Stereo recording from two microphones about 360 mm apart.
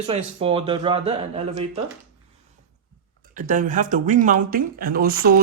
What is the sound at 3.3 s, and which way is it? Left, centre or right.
Speech, right.